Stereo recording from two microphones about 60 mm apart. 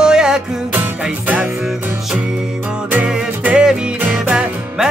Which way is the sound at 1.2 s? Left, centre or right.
Right.